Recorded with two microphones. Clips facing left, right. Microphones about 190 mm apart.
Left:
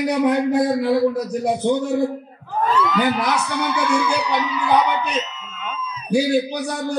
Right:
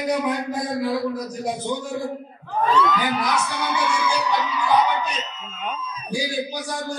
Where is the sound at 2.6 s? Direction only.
5° left (ahead or behind).